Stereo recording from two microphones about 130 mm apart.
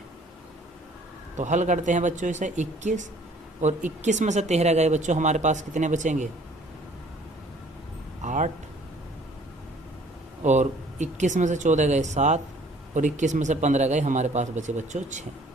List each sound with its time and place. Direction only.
1.4 s speech: 70° right (ahead or behind)
8.2 s a sound: 70° right (ahead or behind)
10.4 s speech: 65° right (ahead or behind)